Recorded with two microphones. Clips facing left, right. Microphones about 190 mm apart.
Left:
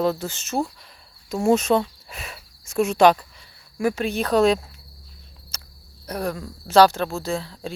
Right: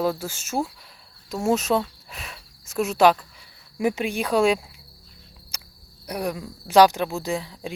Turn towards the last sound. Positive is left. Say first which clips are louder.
# left 1 dB
turn(degrees=-15)  # may be behind; listen again after turning